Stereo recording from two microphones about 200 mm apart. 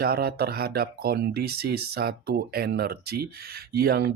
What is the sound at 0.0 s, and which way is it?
Speech, 50° right (ahead or behind).